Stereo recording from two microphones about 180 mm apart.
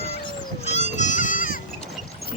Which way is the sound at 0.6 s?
40° left (ahead or behind).